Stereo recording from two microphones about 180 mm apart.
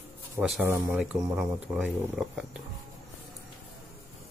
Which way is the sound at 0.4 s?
5° right (ahead or behind).